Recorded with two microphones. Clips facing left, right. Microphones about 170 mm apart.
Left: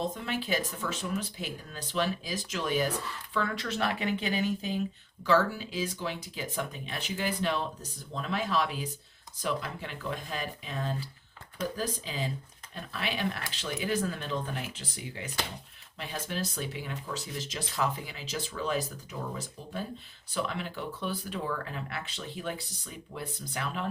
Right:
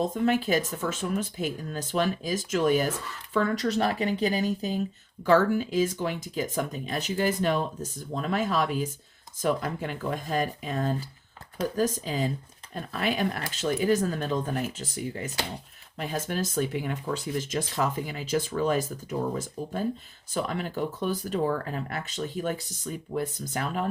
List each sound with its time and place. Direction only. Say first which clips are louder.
0.0 s speech: right 8 dB; 45° right (ahead or behind)
5.2 s speech: right 5 dB; 50° right (ahead or behind)